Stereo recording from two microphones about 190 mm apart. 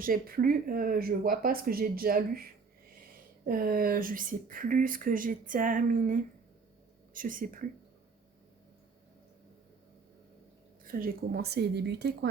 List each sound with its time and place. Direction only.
0.0 s speech: 50° right (ahead or behind)
10.8 s a woman's voice: 50° right (ahead or behind)